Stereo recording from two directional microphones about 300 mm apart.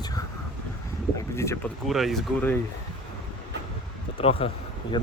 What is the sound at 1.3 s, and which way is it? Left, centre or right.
Speech, centre.